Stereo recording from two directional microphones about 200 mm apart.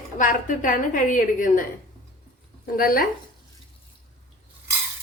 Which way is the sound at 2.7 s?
45° left (ahead or behind).